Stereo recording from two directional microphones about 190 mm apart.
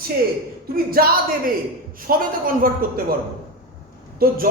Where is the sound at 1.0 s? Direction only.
50° right (ahead or behind).